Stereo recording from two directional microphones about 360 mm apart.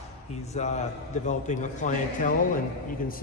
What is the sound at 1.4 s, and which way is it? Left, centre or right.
Speech, left.